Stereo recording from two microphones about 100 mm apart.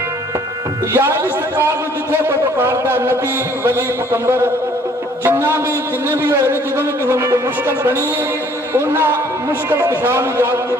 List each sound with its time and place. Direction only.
0.9 s speech: 25° right (ahead or behind)
8.7 s speech: 25° right (ahead or behind)